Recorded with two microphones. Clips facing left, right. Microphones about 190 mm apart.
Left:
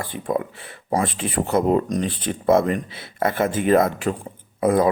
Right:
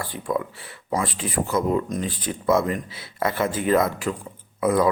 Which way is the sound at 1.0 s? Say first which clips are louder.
Left 2 dB; 55° left (ahead or behind).